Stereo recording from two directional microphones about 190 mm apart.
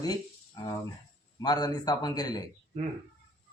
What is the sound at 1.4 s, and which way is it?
Speech, 20° left (ahead or behind).